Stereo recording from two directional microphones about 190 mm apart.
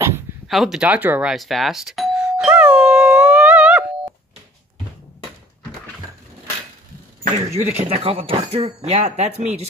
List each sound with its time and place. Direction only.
0.5 s doorbell: centre (ahead or behind)
7.5 s speech: 35° right (ahead or behind)